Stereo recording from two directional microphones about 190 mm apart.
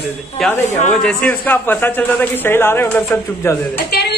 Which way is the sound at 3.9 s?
55° left (ahead or behind).